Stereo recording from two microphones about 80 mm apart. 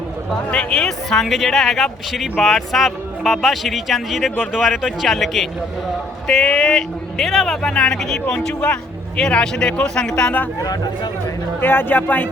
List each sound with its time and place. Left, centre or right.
0.5 s a man's voice: centre
10.6 s speech: left
11.6 s speech: left